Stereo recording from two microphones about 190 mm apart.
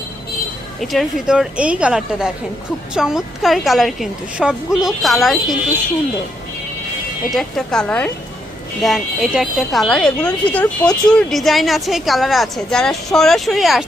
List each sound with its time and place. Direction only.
0.8 s a woman's voice: centre (ahead or behind)
7.3 s a woman's voice: centre (ahead or behind)